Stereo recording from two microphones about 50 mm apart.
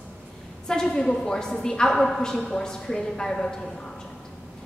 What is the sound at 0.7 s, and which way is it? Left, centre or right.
A woman's voice, centre.